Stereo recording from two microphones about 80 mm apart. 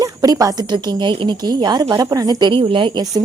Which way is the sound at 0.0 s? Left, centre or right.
Right.